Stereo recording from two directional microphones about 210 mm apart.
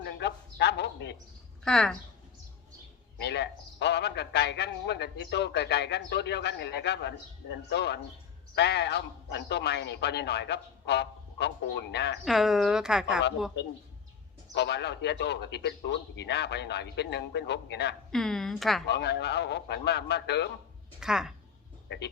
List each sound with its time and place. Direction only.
0.0 s a sound: 55° left (ahead or behind)
1.6 s speech: 5° left (ahead or behind)
3.2 s a man's voice: 55° left (ahead or behind)
12.2 s speech: centre (ahead or behind)
14.5 s a man's voice: 55° left (ahead or behind)
18.1 s speech: centre (ahead or behind)
18.9 s a man's voice: 55° left (ahead or behind)
21.0 s speech: 5° right (ahead or behind)
21.8 s a man's voice: 55° left (ahead or behind)